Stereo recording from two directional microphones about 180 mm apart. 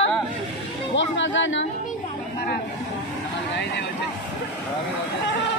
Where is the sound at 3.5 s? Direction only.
75° left (ahead or behind).